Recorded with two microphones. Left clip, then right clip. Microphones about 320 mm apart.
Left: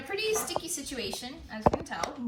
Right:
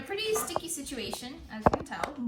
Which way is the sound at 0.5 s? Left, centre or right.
Centre.